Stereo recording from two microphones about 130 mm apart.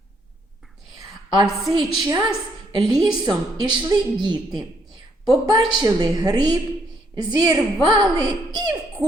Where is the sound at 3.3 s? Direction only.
30° right (ahead or behind).